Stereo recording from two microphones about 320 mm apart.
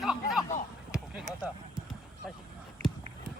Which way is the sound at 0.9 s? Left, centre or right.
Centre.